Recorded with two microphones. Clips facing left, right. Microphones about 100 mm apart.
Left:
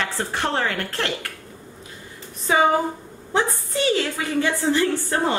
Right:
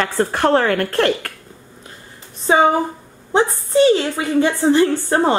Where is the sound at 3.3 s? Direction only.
30° right (ahead or behind).